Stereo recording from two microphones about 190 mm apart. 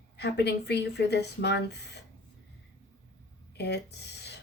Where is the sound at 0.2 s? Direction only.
60° left (ahead or behind).